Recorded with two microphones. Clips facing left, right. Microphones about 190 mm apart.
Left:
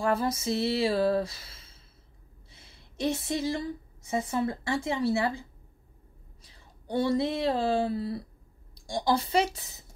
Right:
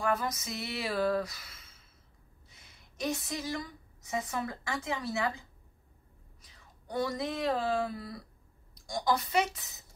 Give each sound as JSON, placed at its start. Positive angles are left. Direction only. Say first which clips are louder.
{"t": 0.0, "sound": "a sound", "louder": "left 5 dB", "side_deg": 30}
{"t": 2.5, "sound": "a woman's voice", "louder": "left 12 dB", "side_deg": 30}
{"t": 6.4, "sound": "a woman's voice", "louder": "left 5 dB", "side_deg": 30}